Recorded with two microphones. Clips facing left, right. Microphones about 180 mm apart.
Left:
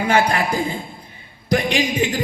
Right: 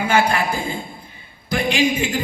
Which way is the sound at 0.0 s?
35° left (ahead or behind).